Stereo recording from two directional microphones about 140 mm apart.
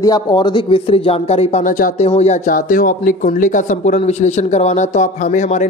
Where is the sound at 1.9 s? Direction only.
50° left (ahead or behind).